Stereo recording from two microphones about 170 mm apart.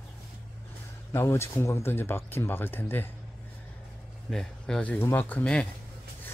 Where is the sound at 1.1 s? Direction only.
15° left (ahead or behind).